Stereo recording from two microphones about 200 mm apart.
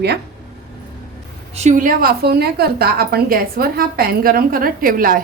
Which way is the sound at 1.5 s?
35° right (ahead or behind).